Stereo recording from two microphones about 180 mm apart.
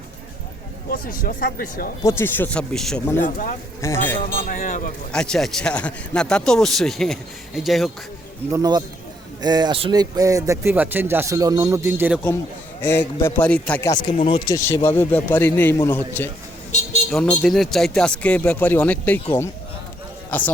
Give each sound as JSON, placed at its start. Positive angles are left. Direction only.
{"t": 0.9, "sound": "speech", "side_deg": 50}
{"t": 2.0, "sound": "a man's voice", "side_deg": 15}
{"t": 3.2, "sound": "speech", "side_deg": 50}
{"t": 3.8, "sound": "a man's voice", "side_deg": 15}
{"t": 4.4, "sound": "speech", "side_deg": 50}
{"t": 5.1, "sound": "a man's voice", "side_deg": 5}
{"t": 8.5, "sound": "a man's voice", "side_deg": -20}
{"t": 12.8, "sound": "a man's voice", "side_deg": 10}
{"t": 13.9, "sound": "a man's voice", "side_deg": 25}